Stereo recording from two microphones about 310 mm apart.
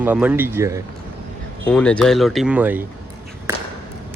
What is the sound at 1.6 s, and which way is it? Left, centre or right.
Speech, centre.